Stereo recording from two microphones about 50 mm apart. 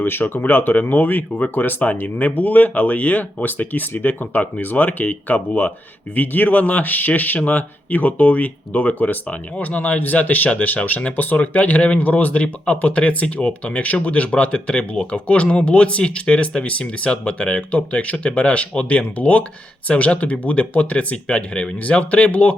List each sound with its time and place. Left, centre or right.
0.0 s speech: left